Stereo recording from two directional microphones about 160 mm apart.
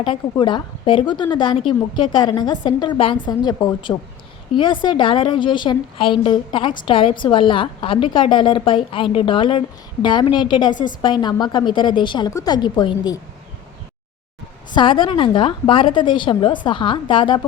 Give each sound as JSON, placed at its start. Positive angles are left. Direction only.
{"t": 0.0, "sound": "a woman's voice", "side_deg": 30}
{"t": 14.8, "sound": "a woman's voice", "side_deg": 30}